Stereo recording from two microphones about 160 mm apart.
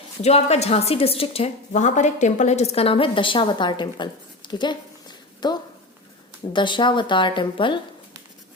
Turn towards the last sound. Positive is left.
turn(degrees=30)  # may be behind; listen again after turning